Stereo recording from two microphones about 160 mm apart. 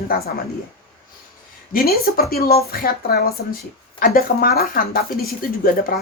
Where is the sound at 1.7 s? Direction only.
70° left (ahead or behind).